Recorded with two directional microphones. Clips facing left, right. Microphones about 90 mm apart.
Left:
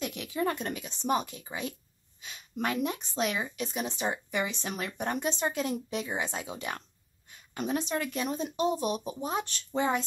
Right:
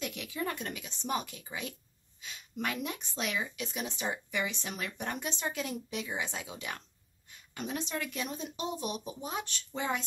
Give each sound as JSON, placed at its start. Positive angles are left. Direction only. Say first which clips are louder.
{"t": 0.0, "sound": "speech", "louder": "left 5 dB", "side_deg": 35}